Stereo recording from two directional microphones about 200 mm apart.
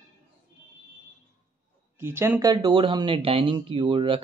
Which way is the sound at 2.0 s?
10° right (ahead or behind).